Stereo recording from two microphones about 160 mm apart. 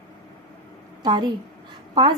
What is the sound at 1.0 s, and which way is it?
A woman's voice, 30° right (ahead or behind).